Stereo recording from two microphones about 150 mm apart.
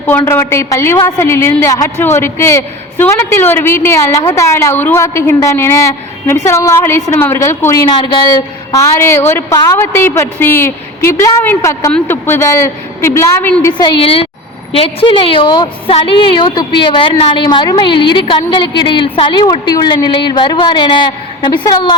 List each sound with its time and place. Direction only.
0.3 s a woman's voice: 20° left (ahead or behind)